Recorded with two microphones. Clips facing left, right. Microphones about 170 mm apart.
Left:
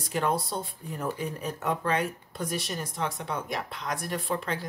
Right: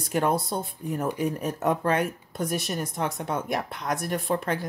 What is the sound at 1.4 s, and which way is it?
Speech, 45° right (ahead or behind).